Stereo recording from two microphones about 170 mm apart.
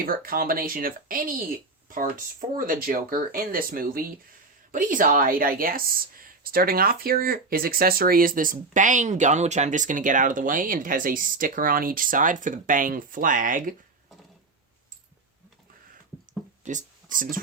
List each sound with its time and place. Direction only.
0.0 s speech: 60° right (ahead or behind)
16.6 s speech: 50° right (ahead or behind)